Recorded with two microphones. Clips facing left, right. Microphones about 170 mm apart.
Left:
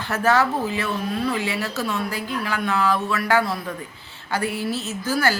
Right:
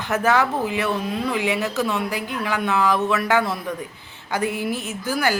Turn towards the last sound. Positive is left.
turn(degrees=-15)  # may be behind; listen again after turning